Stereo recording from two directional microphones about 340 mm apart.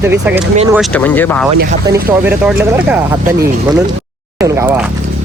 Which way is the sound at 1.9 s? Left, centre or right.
Centre.